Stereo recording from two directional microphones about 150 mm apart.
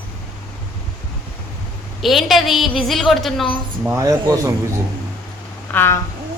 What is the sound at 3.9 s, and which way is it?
Speech, 20° right (ahead or behind).